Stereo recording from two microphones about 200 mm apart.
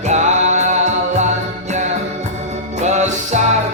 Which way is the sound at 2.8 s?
35° right (ahead or behind).